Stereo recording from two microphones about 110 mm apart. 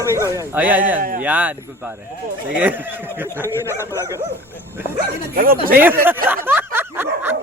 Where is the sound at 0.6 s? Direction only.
15° right (ahead or behind).